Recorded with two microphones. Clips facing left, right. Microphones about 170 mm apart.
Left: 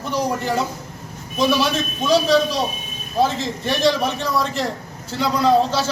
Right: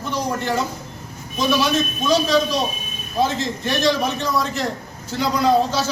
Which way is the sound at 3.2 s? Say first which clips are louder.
Left 1 dB; centre (ahead or behind).